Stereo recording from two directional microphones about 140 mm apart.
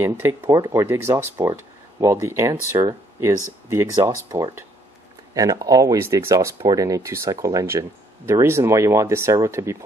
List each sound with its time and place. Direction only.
0.0 s speech: 15° right (ahead or behind)